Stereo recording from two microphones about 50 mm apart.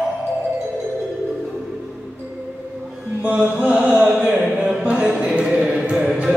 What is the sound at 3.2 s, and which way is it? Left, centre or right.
Mantra, right.